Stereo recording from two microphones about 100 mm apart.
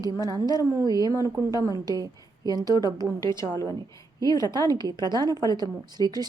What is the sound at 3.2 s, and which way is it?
Speech, 30° left (ahead or behind).